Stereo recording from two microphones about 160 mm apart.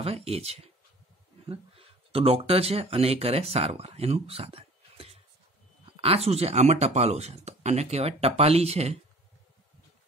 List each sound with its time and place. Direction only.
0.0 s speech: 40° right (ahead or behind)